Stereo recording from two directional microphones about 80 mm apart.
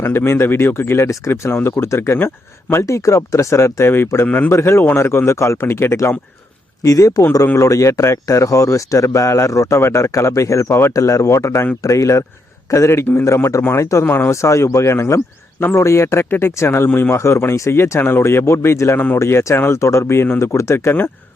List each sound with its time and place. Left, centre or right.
0.0 s speech: left
2.8 s speech: left
6.8 s speech: left
7.4 s speech: left
14.3 s speech: left